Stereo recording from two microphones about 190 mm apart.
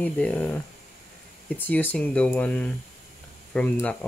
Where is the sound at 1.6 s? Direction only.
10° left (ahead or behind).